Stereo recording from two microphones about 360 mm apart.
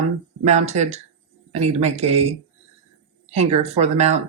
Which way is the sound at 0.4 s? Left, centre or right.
Centre.